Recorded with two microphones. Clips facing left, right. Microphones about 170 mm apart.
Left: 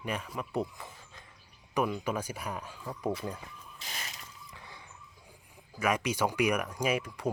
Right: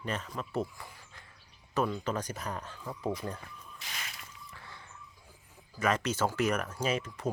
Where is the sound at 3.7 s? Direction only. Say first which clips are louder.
Left 1 dB; 35° left (ahead or behind).